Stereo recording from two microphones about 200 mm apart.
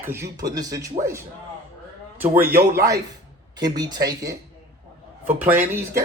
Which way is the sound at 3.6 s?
20° right (ahead or behind).